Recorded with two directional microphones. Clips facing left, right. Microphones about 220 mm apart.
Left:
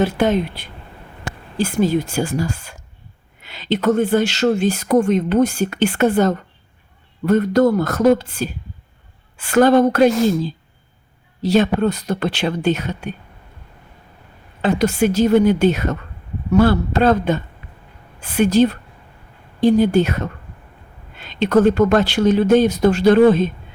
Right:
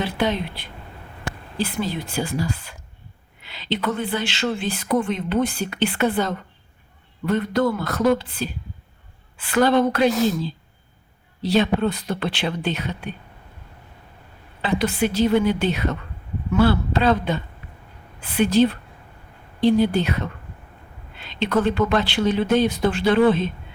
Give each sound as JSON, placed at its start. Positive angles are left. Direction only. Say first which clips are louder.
{"t": 0.0, "sound": "speech", "louder": "left 6 dB", "side_deg": 45}
{"t": 11.4, "sound": "speech", "louder": "left 4 dB", "side_deg": 45}
{"t": 14.6, "sound": "speech", "louder": "left 5 dB", "side_deg": 45}